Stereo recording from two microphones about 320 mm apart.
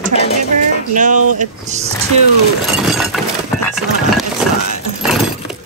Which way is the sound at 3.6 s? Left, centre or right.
Centre.